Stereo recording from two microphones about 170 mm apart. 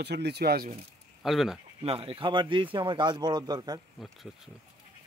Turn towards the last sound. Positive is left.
turn(degrees=-25)  # may be behind; listen again after turning